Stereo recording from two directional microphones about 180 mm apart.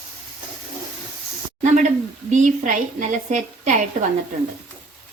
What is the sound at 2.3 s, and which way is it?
A woman's voice, 45° right (ahead or behind).